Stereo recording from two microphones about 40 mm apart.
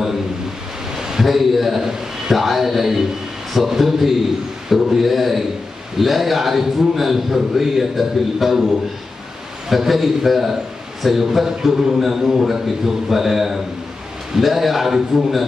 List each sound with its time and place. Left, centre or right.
0.9 s a man's voice: centre
9.7 s a man's voice: centre